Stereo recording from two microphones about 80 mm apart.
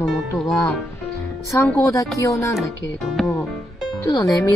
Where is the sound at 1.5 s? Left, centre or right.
Left.